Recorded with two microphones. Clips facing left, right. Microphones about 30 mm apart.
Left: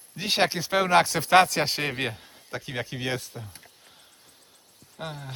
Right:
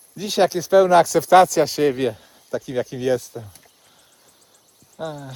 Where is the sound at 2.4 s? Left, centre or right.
Left.